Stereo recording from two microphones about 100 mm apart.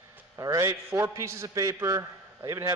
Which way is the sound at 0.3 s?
35° right (ahead or behind).